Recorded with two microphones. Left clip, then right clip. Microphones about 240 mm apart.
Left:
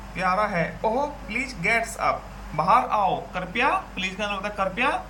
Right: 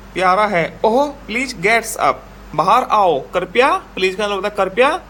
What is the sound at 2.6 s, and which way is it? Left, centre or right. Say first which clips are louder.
A man's voice: right 7 dB; right.